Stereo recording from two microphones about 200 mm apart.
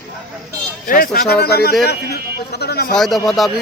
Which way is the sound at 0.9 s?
45° left (ahead or behind).